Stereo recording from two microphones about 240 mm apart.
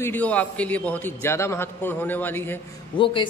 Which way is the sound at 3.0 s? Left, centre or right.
Left.